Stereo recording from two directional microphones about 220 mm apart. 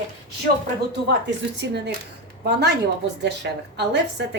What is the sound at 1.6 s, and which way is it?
Speech, 50° right (ahead or behind).